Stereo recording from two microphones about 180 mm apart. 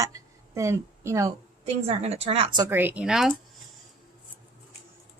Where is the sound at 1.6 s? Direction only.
35° right (ahead or behind).